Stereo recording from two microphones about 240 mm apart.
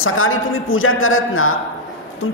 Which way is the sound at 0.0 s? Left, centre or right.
Left.